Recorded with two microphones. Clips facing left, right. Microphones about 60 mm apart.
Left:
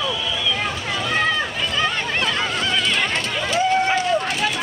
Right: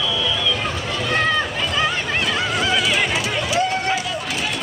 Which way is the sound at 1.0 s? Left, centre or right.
Centre.